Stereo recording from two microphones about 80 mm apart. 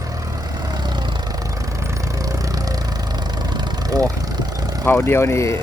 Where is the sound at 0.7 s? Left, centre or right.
Right.